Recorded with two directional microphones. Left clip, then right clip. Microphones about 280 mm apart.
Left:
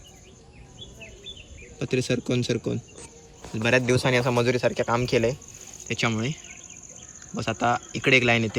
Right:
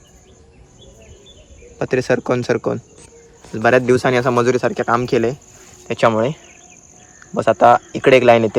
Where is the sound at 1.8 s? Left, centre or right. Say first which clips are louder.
Right 9 dB; centre.